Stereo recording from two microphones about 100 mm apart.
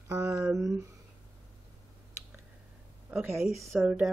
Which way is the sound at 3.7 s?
10° right (ahead or behind).